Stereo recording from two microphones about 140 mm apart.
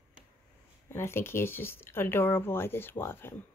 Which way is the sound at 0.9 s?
20° left (ahead or behind).